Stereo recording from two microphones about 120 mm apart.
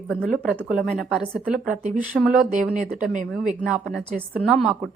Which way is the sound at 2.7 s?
90° right.